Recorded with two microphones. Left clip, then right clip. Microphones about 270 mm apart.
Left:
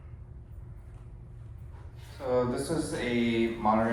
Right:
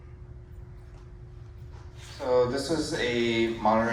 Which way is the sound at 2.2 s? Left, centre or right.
Right.